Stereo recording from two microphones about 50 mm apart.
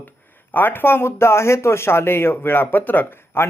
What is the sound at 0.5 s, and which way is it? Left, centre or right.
Speech, left.